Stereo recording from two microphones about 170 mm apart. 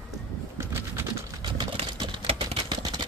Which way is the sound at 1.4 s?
25° right (ahead or behind).